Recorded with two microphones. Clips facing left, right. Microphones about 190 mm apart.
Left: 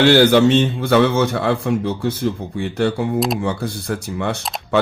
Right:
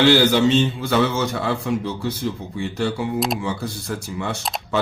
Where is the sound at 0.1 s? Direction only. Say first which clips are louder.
Left 4 dB; 55° left (ahead or behind).